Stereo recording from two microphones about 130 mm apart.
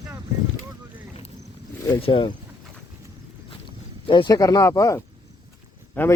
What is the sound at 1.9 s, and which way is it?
Speech, 40° left (ahead or behind).